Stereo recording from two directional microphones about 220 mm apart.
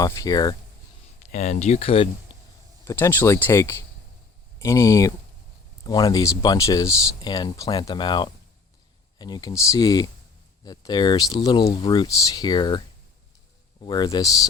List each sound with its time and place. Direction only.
0.0 s speech: 15° left (ahead or behind)
1.3 s speech: 35° left (ahead or behind)
2.8 s speech: 10° left (ahead or behind)
13.8 s speech: 20° left (ahead or behind)